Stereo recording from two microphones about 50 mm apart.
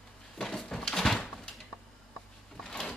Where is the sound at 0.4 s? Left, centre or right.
Centre.